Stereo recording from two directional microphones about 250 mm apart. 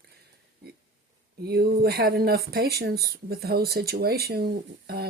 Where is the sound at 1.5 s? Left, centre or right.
Right.